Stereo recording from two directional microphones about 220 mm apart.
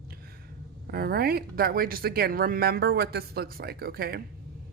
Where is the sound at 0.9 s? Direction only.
45° right (ahead or behind).